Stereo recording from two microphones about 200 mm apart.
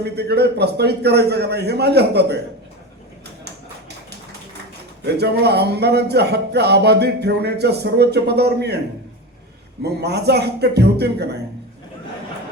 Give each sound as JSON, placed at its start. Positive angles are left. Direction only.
{"t": 0.0, "sound": "speech", "side_deg": -55}
{"t": 5.0, "sound": "speech", "side_deg": -55}
{"t": 9.8, "sound": "speech", "side_deg": -55}